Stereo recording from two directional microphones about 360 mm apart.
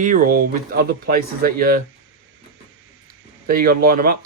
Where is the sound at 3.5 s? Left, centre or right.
Right.